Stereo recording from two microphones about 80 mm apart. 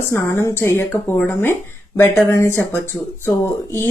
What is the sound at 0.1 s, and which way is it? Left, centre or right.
Speech, left.